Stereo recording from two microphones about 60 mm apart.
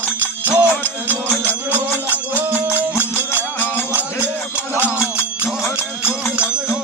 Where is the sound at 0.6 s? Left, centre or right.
Right.